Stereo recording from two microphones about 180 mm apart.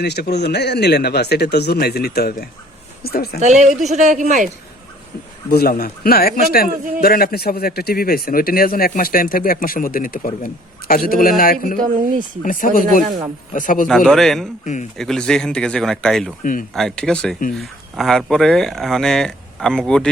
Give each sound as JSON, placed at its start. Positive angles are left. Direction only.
{"t": 0.0, "sound": "a woman's voice", "side_deg": 65}
{"t": 3.4, "sound": "speech", "side_deg": -40}
{"t": 5.5, "sound": "a man's voice", "side_deg": 60}
{"t": 13.8, "sound": "speech", "side_deg": 0}
{"t": 14.6, "sound": "a man's voice", "side_deg": 40}
{"t": 14.9, "sound": "speech", "side_deg": 5}
{"t": 16.4, "sound": "a man's voice", "side_deg": 50}
{"t": 16.7, "sound": "speech", "side_deg": 5}